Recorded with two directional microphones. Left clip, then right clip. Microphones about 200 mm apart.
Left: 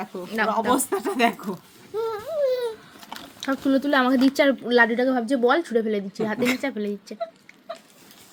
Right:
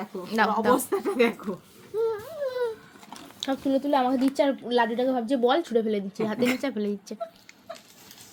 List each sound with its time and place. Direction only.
0.3 s speech: 15° right (ahead or behind)
0.7 s speech: 25° left (ahead or behind)
2.0 s a sound: 10° left (ahead or behind)
3.7 s a woman's voice: 35° left (ahead or behind); by 6.6 s 10° left (ahead or behind)
6.6 s speech: 5° right (ahead or behind)